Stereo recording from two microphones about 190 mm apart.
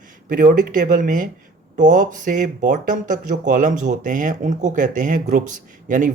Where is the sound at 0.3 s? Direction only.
45° right (ahead or behind).